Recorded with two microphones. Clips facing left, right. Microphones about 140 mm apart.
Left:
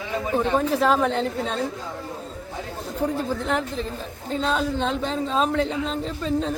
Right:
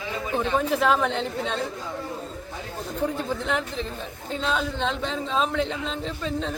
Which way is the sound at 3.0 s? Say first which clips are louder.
Left 2 dB; 40° left (ahead or behind).